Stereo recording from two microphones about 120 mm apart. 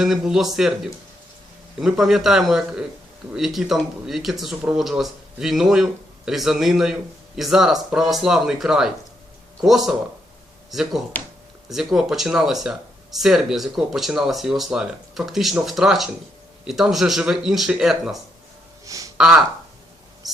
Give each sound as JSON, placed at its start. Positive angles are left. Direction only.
{"t": 0.0, "sound": "speech", "side_deg": -5}
{"t": 1.8, "sound": "speech", "side_deg": -5}
{"t": 18.9, "sound": "a sound", "side_deg": -30}
{"t": 19.1, "sound": "speech", "side_deg": -5}